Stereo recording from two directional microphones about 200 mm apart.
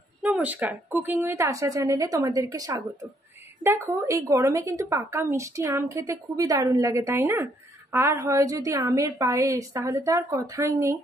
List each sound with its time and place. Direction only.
0.2 s a woman's voice: 5° right (ahead or behind)